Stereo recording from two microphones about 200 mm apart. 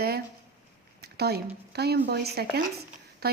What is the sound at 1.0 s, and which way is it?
A woman's voice, 55° right (ahead or behind).